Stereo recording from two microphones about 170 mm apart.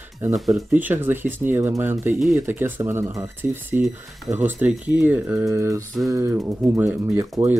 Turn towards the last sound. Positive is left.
turn(degrees=-15)  # may be behind; listen again after turning